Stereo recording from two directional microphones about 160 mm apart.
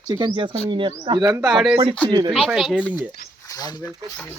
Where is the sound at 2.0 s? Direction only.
25° right (ahead or behind).